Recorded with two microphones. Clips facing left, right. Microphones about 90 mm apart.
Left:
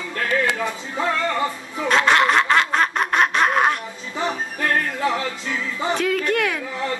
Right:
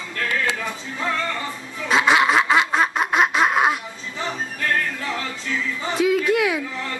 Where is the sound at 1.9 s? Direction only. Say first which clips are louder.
Even; 5° right (ahead or behind).